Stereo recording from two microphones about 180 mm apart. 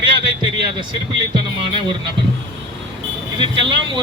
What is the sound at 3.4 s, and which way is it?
Speech, 25° right (ahead or behind).